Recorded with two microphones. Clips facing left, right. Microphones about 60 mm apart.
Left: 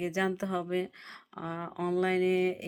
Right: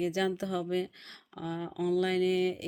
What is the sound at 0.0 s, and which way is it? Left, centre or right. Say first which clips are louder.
Speech: right 1 dB; left.